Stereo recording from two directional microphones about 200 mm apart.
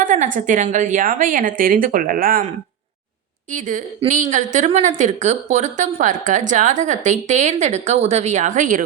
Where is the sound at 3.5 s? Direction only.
40° right (ahead or behind).